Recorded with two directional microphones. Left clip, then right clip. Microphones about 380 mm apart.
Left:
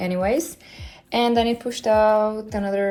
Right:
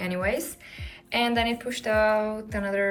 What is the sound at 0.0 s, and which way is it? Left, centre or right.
Music, centre.